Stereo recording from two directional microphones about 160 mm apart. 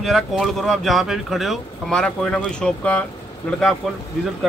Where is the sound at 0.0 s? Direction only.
Centre (ahead or behind).